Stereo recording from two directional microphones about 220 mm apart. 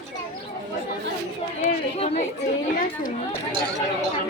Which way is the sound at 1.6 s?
35° left (ahead or behind).